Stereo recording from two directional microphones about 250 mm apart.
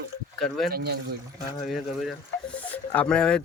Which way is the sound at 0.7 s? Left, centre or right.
Right.